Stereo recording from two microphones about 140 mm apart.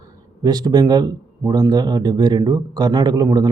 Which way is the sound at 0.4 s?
30° right (ahead or behind).